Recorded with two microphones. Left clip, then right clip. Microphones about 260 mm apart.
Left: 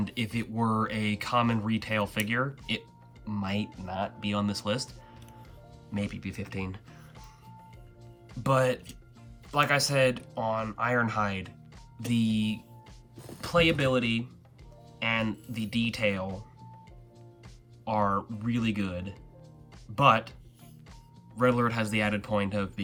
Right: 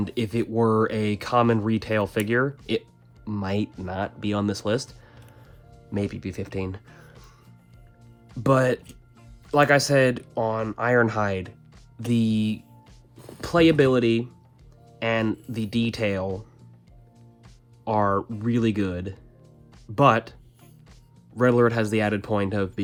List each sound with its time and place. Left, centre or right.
0.0 s speech: right
5.9 s speech: right
8.4 s speech: right
17.8 s speech: right
21.3 s speech: right